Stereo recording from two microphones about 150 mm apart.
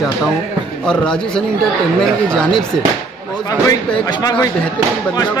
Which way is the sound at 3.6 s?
25° left (ahead or behind).